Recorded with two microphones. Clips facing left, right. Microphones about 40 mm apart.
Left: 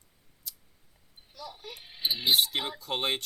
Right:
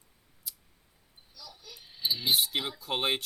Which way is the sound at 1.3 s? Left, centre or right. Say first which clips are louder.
Left 7 dB; left.